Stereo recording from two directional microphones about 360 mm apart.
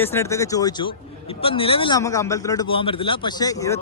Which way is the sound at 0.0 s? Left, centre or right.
Centre.